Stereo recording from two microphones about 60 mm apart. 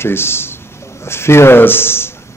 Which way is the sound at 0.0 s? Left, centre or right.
Left.